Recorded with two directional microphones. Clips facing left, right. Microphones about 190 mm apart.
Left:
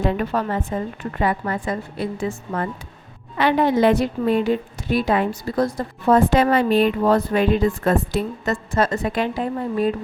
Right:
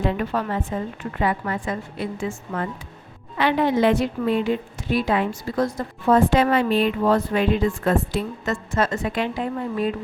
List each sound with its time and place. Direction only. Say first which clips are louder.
0.0 s a woman's voice: left 2 dB; 40° left (ahead or behind)